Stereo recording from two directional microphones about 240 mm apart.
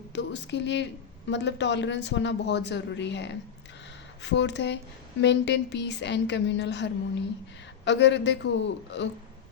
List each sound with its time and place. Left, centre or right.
0.1 s speech: left